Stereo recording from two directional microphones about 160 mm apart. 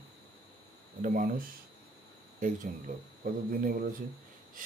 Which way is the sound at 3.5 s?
65° right (ahead or behind).